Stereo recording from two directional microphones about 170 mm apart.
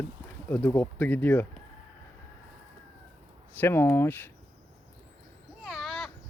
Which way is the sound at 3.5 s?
10° left (ahead or behind).